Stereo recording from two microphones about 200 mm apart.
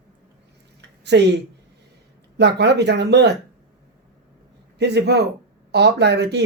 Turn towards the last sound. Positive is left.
turn(degrees=-55)  # may be behind; listen again after turning